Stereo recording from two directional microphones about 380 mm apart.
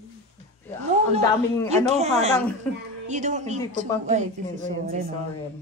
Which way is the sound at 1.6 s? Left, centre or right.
Centre.